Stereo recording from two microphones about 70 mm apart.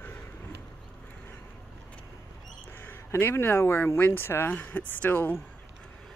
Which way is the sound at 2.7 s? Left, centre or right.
Left.